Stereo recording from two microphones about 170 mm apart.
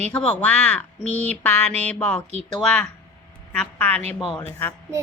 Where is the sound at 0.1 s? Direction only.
10° left (ahead or behind).